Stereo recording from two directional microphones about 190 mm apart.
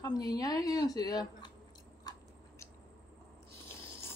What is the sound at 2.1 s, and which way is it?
Biting, 20° left (ahead or behind).